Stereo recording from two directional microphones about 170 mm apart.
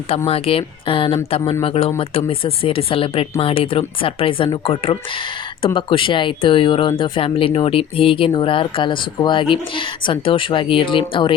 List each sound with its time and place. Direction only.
0.3 s speech: 35° left (ahead or behind)